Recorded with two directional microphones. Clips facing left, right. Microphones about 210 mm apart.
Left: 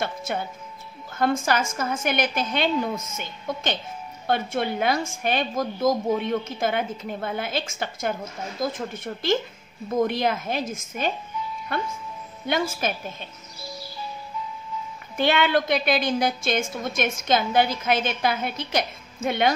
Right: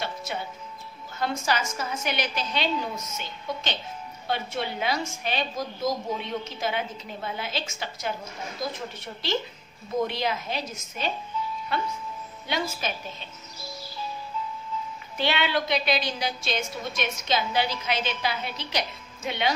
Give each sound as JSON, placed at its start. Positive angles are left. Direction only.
{"t": 0.0, "sound": "music", "side_deg": 50}
{"t": 1.1, "sound": "a woman's voice", "side_deg": 50}
{"t": 15.1, "sound": "a woman's voice", "side_deg": 50}